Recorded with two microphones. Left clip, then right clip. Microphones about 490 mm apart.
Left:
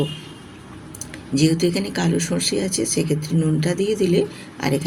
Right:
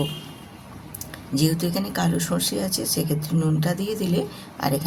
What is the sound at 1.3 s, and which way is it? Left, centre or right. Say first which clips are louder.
Speech: left 5 dB; right.